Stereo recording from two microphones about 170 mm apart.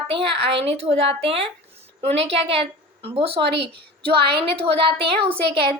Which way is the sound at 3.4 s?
85° right.